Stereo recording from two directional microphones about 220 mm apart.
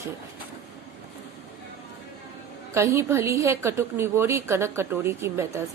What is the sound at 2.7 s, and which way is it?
A woman's voice, 10° right (ahead or behind).